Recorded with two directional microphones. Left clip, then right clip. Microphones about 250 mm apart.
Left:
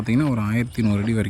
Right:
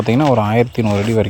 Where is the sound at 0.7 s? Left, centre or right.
Centre.